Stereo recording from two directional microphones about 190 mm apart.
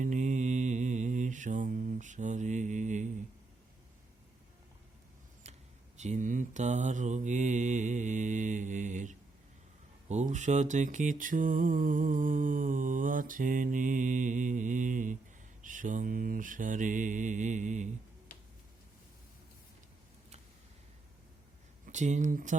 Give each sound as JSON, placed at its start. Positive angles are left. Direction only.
{"t": 0.0, "sound": "mantra", "side_deg": -40}
{"t": 6.0, "sound": "mantra", "side_deg": -40}
{"t": 21.8, "sound": "speech", "side_deg": -40}